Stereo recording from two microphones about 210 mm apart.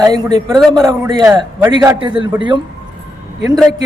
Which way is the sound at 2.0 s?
25° right (ahead or behind).